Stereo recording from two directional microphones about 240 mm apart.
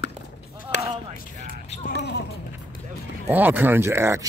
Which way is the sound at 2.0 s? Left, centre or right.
Left.